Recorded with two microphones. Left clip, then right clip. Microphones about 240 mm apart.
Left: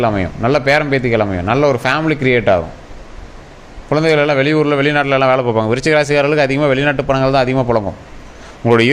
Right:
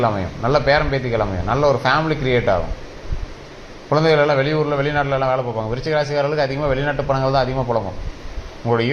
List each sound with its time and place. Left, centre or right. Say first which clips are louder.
0.0 s a man's voice: left 4 dB; left
3.8 s a man's voice: left 2 dB; left